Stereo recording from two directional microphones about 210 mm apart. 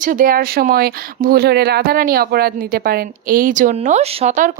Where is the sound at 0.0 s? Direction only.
40° right (ahead or behind).